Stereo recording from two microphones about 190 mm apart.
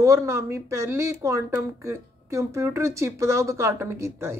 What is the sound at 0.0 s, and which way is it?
A woman's voice, 15° right (ahead or behind).